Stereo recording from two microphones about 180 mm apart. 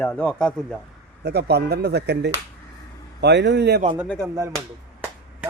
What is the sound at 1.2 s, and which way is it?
Speech, 65° right (ahead or behind).